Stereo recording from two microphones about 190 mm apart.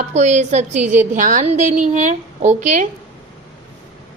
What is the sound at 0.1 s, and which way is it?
A woman's voice, 35° right (ahead or behind).